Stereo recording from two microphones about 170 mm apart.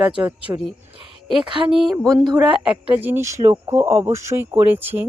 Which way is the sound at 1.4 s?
30° right (ahead or behind).